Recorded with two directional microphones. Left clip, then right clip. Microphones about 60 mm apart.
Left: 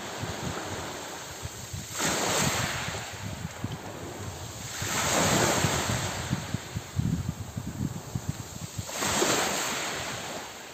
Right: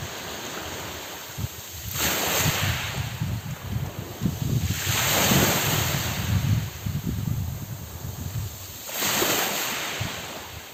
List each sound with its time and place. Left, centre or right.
0.3 s waves: centre
2.0 s ocean: right
4.9 s ocean: right
6.1 s wind noise: centre
8.9 s ocean: right